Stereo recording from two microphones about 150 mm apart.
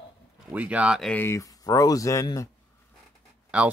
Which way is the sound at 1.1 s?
15° left (ahead or behind).